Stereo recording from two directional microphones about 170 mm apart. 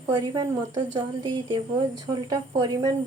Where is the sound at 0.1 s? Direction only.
20° right (ahead or behind).